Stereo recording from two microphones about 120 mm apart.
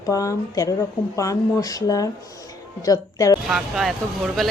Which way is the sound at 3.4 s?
5° right (ahead or behind).